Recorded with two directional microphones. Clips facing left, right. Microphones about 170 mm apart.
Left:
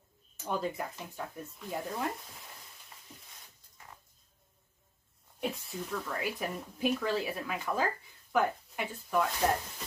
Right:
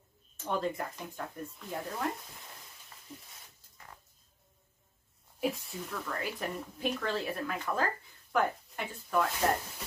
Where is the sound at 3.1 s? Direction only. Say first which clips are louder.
Right 7 dB; centre (ahead or behind).